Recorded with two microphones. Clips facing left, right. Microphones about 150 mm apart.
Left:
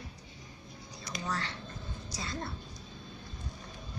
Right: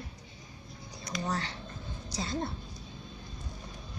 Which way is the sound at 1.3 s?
30° right (ahead or behind).